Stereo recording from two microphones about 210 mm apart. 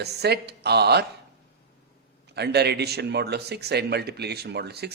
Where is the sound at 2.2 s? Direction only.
50° right (ahead or behind).